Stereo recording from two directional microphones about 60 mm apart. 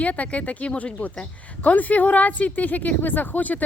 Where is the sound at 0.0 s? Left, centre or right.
Left.